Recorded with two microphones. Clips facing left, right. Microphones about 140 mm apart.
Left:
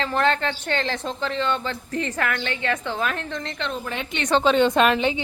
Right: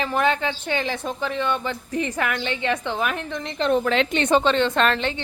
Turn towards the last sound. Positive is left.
turn(degrees=10)  # may be behind; listen again after turning